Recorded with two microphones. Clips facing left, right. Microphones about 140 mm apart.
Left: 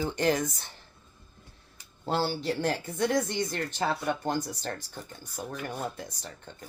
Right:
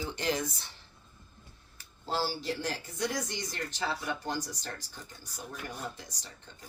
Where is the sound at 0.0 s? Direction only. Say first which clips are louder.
Left 6 dB; 50° left (ahead or behind).